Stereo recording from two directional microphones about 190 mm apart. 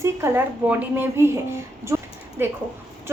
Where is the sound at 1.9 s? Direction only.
15° right (ahead or behind).